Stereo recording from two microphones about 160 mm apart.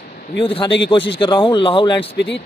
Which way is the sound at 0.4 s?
35° left (ahead or behind).